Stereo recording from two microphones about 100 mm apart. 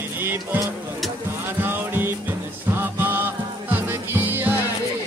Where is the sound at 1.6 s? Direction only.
20° right (ahead or behind).